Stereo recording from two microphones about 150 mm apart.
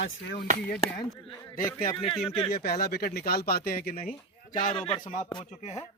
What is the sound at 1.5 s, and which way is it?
Speech, 70° left (ahead or behind).